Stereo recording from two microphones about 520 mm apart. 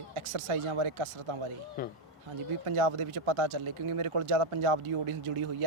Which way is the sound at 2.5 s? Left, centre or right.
Right.